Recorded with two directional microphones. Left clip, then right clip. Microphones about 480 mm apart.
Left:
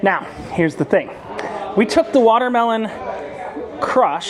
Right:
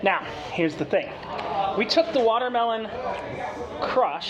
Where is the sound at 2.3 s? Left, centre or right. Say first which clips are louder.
Left 8 dB; left.